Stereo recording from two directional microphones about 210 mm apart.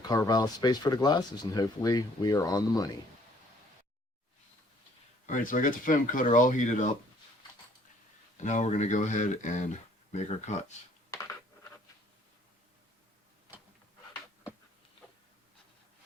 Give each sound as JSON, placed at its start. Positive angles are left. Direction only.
{"t": 0.0, "sound": "speech", "side_deg": 20}
{"t": 5.2, "sound": "speech", "side_deg": 40}
{"t": 8.4, "sound": "speech", "side_deg": 35}